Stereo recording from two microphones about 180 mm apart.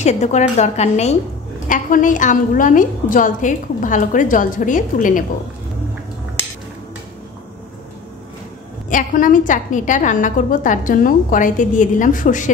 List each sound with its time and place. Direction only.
0.0 s a woman's voice: 40° left (ahead or behind)
8.9 s a woman's voice: 50° left (ahead or behind)